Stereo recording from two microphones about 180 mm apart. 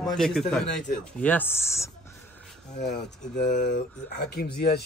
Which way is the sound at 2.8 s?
65° left (ahead or behind).